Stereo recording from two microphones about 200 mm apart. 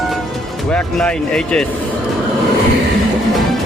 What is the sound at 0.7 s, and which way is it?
Music, 5° left (ahead or behind).